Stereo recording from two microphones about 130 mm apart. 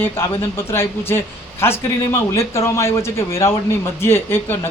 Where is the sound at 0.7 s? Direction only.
15° left (ahead or behind).